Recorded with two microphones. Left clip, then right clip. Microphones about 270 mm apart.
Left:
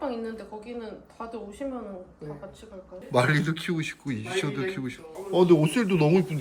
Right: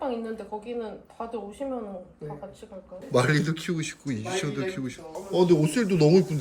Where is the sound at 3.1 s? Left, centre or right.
Centre.